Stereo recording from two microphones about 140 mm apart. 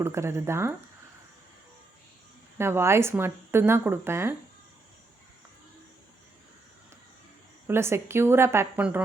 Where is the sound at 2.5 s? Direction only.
20° right (ahead or behind).